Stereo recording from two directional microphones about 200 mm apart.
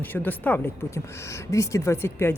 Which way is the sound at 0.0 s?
10° left (ahead or behind).